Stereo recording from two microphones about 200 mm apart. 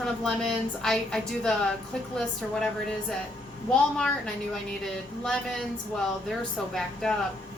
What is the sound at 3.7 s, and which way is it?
A woman's voice, 5° left (ahead or behind).